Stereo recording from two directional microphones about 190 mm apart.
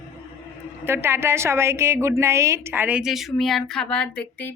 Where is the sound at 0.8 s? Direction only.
15° right (ahead or behind); by 4.5 s 10° left (ahead or behind).